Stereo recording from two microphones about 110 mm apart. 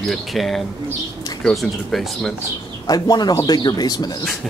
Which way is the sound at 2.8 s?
35° left (ahead or behind).